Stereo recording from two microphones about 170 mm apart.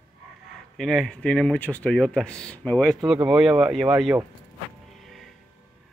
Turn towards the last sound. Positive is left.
turn(degrees=0)  # may be behind; listen again after turning